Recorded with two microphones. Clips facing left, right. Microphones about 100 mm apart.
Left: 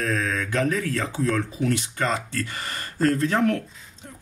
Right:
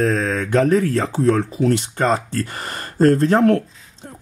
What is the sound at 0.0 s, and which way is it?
Speech, 30° right (ahead or behind).